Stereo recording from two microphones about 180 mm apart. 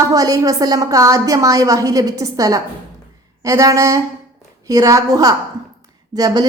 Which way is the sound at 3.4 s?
20° right (ahead or behind).